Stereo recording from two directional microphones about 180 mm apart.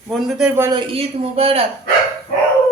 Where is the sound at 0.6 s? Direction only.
25° right (ahead or behind).